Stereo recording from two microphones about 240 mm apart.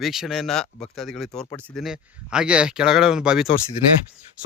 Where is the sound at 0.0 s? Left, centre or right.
Centre.